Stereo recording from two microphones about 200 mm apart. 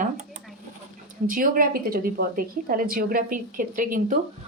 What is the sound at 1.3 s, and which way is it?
A woman's voice, 45° right (ahead or behind).